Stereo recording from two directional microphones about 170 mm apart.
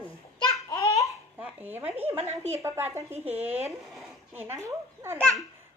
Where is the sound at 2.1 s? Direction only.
40° right (ahead or behind).